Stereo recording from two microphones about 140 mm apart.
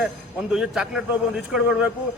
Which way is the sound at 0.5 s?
5° right (ahead or behind).